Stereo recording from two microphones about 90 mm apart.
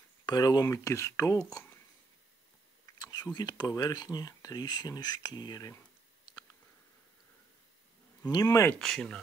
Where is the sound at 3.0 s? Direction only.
45° left (ahead or behind).